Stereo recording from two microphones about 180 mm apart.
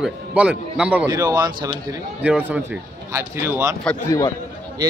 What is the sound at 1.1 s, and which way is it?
Speech, 20° right (ahead or behind).